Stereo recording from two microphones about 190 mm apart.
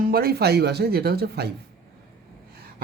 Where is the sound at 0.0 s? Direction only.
55° right (ahead or behind).